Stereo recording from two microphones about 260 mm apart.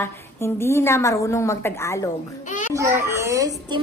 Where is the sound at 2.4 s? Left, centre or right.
Left.